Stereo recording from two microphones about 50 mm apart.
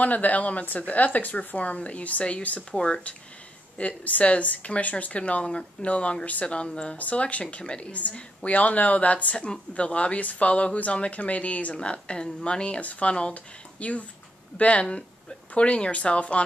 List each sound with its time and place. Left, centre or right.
0.0 s speech: left